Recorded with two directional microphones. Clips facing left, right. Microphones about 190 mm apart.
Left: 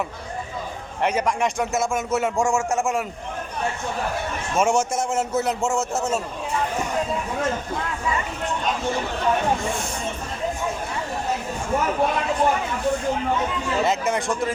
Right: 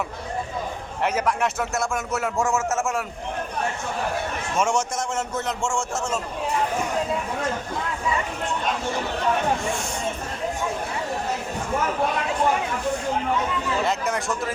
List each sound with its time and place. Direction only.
1.3 s speech: 5° right (ahead or behind)
4.5 s speech: 10° left (ahead or behind)
13.8 s speech: centre (ahead or behind)